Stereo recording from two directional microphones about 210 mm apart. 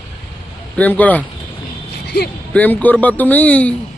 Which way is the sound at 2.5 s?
5° left (ahead or behind).